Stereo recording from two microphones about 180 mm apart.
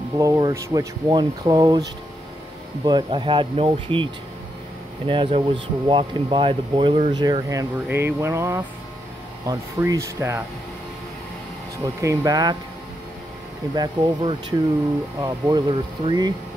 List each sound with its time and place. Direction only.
0.2 s speech: 20° right (ahead or behind)
11.8 s speech: 15° right (ahead or behind)
13.7 s speech: 20° right (ahead or behind)